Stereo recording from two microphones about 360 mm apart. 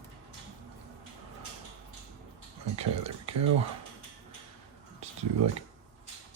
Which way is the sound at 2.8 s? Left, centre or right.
Centre.